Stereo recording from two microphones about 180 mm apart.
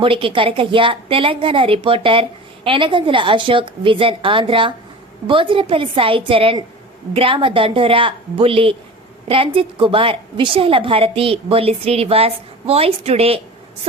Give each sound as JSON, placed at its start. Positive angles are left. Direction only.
{"t": 0.0, "sound": "a woman's voice", "side_deg": -30}